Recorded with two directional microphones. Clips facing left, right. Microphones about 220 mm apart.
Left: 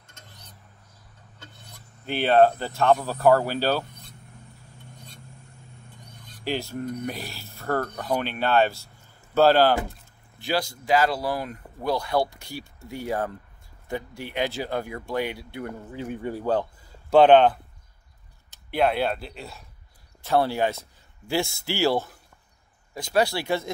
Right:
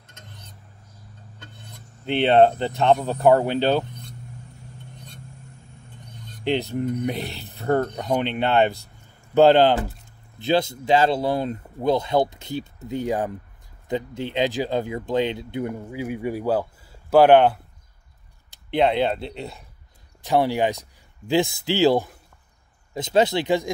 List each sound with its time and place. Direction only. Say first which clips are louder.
2.0 s speech: right 2 dB; 20° right (ahead or behind)
6.4 s speech: right 6 dB; 20° right (ahead or behind)